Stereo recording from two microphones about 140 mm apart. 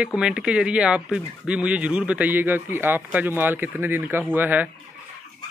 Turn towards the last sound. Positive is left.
turn(degrees=-15)  # may be behind; listen again after turning